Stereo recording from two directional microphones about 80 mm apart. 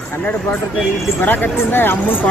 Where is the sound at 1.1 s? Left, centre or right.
Left.